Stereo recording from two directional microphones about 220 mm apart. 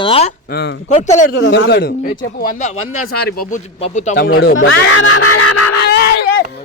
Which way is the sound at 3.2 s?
45° left (ahead or behind).